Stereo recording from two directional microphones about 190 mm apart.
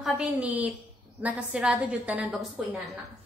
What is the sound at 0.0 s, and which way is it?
A woman's voice, 5° right (ahead or behind).